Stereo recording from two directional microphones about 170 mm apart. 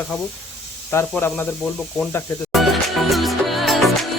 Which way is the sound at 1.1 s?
10° left (ahead or behind).